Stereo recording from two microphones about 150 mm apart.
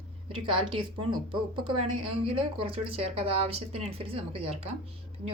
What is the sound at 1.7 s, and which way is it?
A woman's voice, 40° right (ahead or behind).